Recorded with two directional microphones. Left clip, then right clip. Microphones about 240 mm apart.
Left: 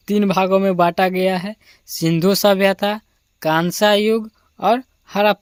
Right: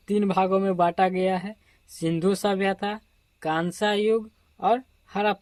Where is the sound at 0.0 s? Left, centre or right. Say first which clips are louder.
Left 6 dB; left.